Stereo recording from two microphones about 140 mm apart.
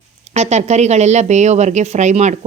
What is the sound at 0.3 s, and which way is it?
A woman's voice, 55° right (ahead or behind).